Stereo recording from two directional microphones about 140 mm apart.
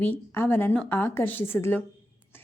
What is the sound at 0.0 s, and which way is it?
A woman's voice, 15° left (ahead or behind).